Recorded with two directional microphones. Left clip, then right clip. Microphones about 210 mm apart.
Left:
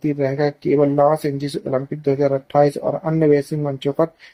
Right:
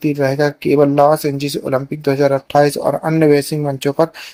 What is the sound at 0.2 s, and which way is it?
Speech, 25° right (ahead or behind).